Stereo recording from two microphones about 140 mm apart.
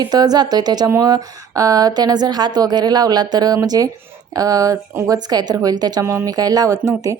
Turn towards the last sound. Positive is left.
turn(degrees=-25)  # may be behind; listen again after turning